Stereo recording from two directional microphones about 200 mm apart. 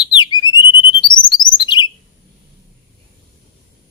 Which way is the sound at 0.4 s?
90° left.